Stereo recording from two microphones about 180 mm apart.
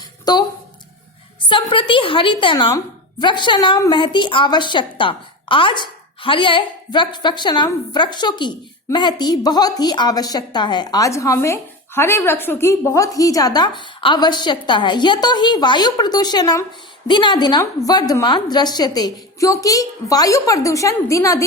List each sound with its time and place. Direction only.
0.3 s a woman's voice: 20° left (ahead or behind)